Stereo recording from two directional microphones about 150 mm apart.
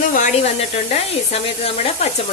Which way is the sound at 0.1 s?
55° left (ahead or behind).